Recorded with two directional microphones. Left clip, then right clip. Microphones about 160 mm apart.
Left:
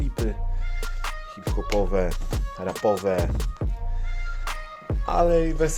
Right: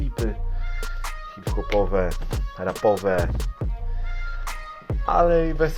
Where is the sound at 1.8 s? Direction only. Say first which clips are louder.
Right 2 dB; 25° left (ahead or behind).